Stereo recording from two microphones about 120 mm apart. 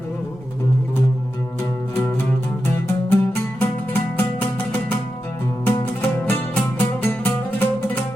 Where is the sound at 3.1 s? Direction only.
20° left (ahead or behind).